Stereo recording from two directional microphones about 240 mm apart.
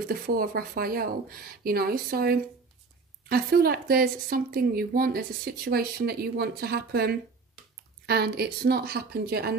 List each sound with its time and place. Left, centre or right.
0.0 s speech: right